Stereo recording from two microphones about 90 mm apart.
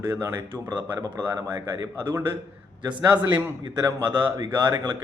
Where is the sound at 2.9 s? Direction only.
15° right (ahead or behind).